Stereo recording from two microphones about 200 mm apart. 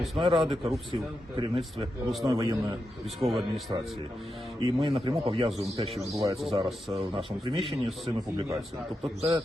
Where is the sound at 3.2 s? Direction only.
30° right (ahead or behind).